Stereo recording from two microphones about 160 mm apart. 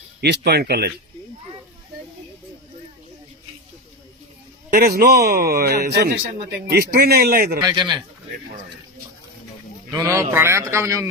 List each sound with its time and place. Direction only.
0.2 s speech: 90° right
4.7 s speech: 70° right (ahead or behind)
7.6 s speech: 25° right (ahead or behind)
9.9 s a man's voice: 20° right (ahead or behind)